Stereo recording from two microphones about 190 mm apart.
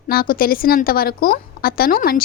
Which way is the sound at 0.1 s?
50° left (ahead or behind).